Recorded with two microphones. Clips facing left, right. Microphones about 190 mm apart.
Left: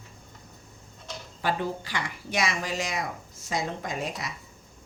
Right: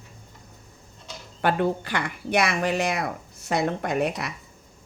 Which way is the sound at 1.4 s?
60° right (ahead or behind).